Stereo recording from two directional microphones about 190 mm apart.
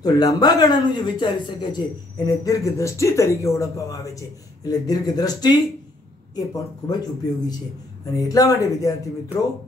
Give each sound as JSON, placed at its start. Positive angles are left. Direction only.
{"t": 0.0, "sound": "speech", "side_deg": 20}